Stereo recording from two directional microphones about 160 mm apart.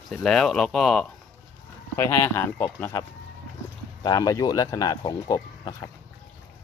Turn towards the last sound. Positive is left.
turn(degrees=25)  # may be behind; listen again after turning